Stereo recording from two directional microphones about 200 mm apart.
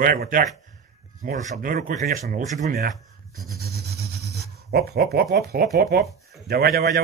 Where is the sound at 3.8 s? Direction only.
55° right (ahead or behind).